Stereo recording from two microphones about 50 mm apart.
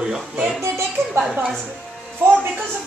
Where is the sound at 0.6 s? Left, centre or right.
Right.